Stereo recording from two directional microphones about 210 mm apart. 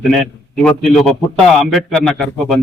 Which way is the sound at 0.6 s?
Centre (ahead or behind).